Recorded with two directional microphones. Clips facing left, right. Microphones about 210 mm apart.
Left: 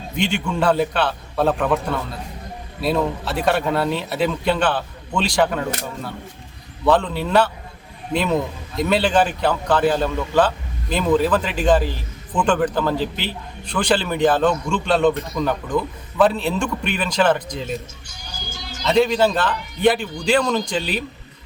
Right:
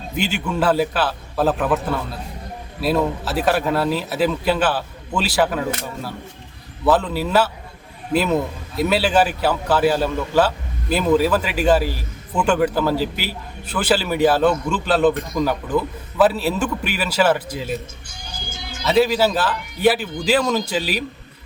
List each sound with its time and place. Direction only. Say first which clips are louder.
0.2 s a man's voice: even; 5° right (ahead or behind)
18.0 s music: right 1 dB; 55° right (ahead or behind)
18.8 s a man's voice: even; 5° right (ahead or behind)